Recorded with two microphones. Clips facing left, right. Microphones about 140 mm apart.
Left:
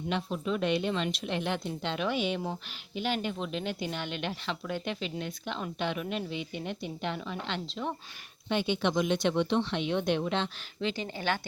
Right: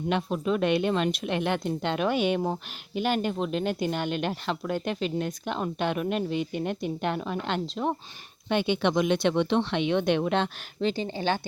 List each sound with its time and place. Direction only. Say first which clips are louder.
0.1 s speech: right 5 dB; 55° right (ahead or behind)
8.4 s speech: right 4 dB; 60° right (ahead or behind)
10.8 s speech: right 6 dB; 35° right (ahead or behind)